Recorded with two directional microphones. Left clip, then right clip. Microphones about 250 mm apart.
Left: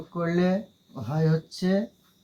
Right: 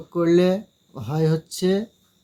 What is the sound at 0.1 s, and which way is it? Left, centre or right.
Speech, right.